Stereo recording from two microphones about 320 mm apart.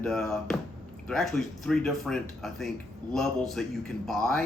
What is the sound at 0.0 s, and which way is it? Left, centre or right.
A man's voice, centre.